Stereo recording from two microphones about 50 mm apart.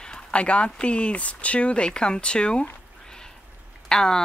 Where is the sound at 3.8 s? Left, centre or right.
Centre.